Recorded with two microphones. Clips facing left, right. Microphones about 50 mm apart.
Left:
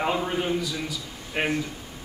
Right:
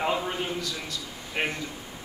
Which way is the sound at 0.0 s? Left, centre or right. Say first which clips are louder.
Left 2 dB; centre.